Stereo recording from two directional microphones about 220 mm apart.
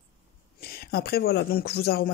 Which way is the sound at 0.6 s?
45° left (ahead or behind).